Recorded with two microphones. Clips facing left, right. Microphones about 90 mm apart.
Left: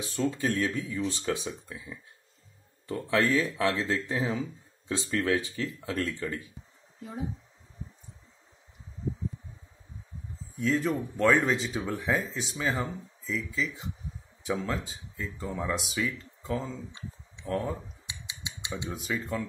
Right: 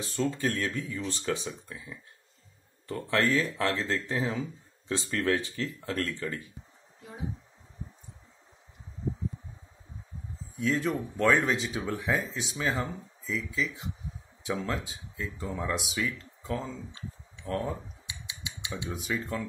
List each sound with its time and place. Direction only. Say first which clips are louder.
0.0 s speech: even; 5° left (ahead or behind)
10.5 s speech: left 1 dB; centre (ahead or behind)
18.0 s cutlery: even; 25° left (ahead or behind)
18.9 s speech: even; centre (ahead or behind)